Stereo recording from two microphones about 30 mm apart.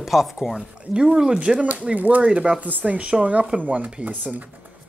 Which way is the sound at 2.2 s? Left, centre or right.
Right.